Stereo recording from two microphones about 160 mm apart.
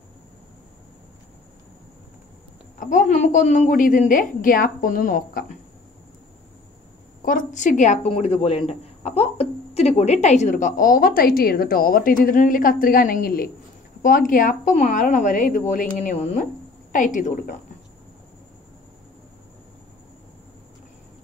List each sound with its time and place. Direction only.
2.8 s a woman's voice: 55° left (ahead or behind)
7.2 s a woman's voice: 55° left (ahead or behind)